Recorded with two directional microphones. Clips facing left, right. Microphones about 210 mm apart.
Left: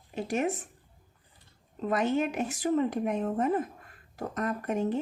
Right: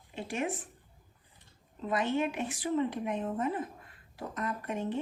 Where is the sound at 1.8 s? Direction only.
45° left (ahead or behind).